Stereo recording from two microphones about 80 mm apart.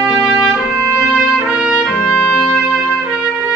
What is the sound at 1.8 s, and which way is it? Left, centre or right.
Music, centre.